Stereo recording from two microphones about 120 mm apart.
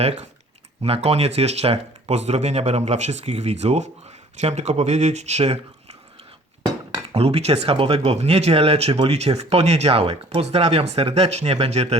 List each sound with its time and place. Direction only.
0.8 s speech: 55° right (ahead or behind)
7.1 s speech: 60° right (ahead or behind)